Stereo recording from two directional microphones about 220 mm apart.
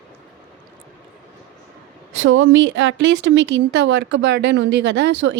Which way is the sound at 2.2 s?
60° right (ahead or behind).